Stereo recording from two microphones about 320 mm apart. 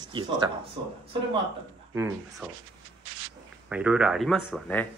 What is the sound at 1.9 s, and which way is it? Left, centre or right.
Speech, centre.